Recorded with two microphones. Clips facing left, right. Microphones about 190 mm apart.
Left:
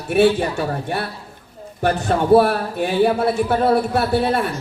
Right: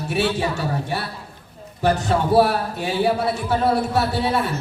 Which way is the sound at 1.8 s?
55° left (ahead or behind).